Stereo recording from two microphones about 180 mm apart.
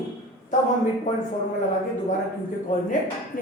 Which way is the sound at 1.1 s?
45° left (ahead or behind).